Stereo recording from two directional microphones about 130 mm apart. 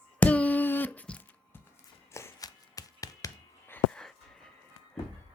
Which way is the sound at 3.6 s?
10° left (ahead or behind).